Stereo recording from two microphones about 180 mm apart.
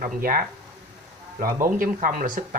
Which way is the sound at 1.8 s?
50° right (ahead or behind).